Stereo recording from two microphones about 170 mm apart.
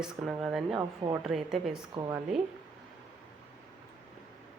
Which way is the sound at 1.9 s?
20° right (ahead or behind).